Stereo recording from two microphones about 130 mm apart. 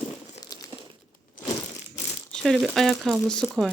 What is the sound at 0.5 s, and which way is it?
Crumpling, 30° left (ahead or behind).